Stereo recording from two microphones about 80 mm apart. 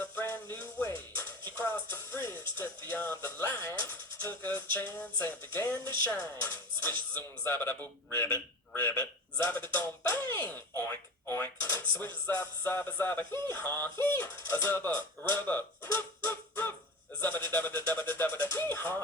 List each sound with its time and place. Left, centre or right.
0.0 s music: left
1.9 s speech: left
15.9 s music: left
17.2 s speech: left